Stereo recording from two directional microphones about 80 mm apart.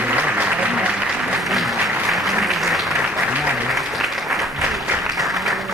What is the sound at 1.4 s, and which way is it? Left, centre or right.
Applause, centre.